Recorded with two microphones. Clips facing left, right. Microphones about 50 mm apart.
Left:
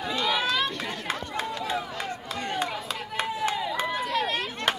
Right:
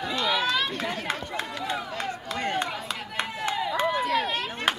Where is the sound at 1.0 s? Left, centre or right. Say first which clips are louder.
Even; centre.